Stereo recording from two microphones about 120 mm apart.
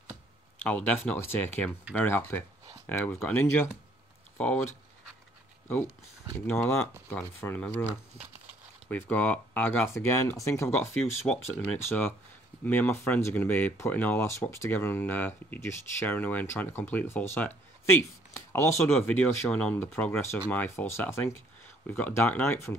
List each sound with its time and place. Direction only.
0.6 s speech: 10° left (ahead or behind)
6.4 s speech: 10° left (ahead or behind)
8.8 s speech: 15° left (ahead or behind)
11.3 s speech: 10° left (ahead or behind)